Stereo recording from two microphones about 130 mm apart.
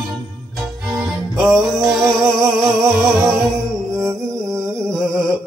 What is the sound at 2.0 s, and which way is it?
Music, 25° right (ahead or behind).